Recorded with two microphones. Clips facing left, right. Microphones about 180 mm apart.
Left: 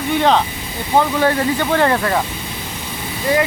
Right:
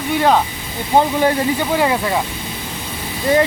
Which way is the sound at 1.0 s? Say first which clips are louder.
Even; 15° right (ahead or behind).